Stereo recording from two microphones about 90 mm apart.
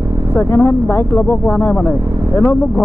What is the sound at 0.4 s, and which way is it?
Speech, 25° left (ahead or behind).